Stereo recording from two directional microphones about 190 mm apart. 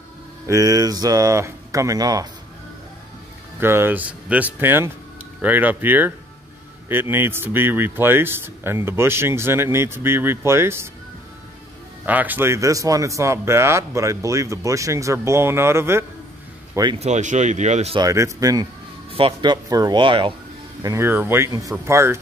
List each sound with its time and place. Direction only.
0.5 s speech: 15° right (ahead or behind)
3.5 s speech: 10° right (ahead or behind)
12.1 s speech: 10° right (ahead or behind)
17.0 s speech: 40° right (ahead or behind)
17.9 s speech: 15° right (ahead or behind)
20.8 s speech: 15° right (ahead or behind)